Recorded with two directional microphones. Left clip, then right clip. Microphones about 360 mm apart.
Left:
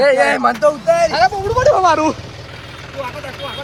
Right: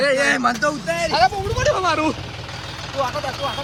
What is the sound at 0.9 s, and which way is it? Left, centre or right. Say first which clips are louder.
Speech: left 3 dB; centre.